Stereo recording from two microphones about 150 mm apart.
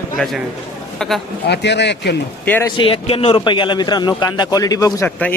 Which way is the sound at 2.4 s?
10° left (ahead or behind).